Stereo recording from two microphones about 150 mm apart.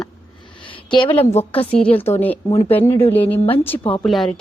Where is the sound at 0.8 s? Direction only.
30° left (ahead or behind).